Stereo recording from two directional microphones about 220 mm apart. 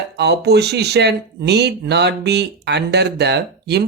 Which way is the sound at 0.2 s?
50° right (ahead or behind).